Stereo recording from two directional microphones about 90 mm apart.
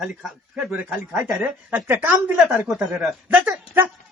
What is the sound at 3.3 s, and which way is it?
Speech, 15° right (ahead or behind).